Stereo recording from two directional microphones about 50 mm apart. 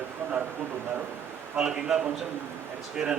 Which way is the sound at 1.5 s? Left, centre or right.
Centre.